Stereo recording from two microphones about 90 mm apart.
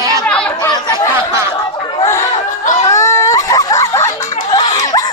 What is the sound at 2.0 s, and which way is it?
Chatter, 35° left (ahead or behind).